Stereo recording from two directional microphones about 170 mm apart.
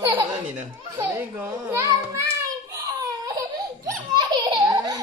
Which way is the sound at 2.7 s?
20° right (ahead or behind).